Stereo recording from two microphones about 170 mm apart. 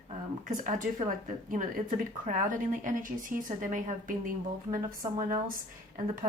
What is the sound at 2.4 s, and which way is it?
Speech, 50° right (ahead or behind).